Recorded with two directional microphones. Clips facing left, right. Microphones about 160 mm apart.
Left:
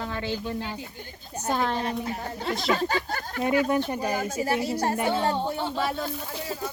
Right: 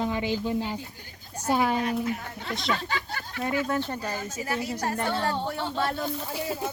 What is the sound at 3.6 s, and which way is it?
Speech, 15° left (ahead or behind).